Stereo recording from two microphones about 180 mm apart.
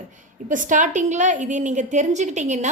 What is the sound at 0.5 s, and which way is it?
A woman's voice, 45° right (ahead or behind).